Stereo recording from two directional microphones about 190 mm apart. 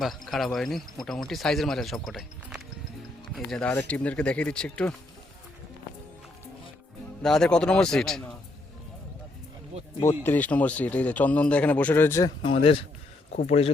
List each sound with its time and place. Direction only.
0.0 s speech: centre (ahead or behind)
7.2 s speech: 5° left (ahead or behind)
9.7 s a sound: 35° right (ahead or behind)
10.2 s speech: 10° left (ahead or behind); by 13.7 s 35° left (ahead or behind)